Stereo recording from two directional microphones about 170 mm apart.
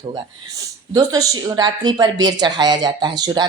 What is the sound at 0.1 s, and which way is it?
Speech, 20° right (ahead or behind).